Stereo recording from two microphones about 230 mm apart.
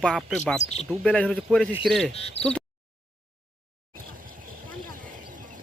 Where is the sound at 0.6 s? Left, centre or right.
Left.